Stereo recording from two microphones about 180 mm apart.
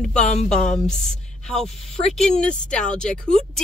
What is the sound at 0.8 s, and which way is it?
Speech, 40° left (ahead or behind).